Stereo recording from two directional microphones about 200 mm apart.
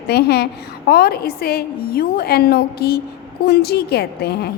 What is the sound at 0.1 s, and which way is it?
A woman's voice, 55° left (ahead or behind).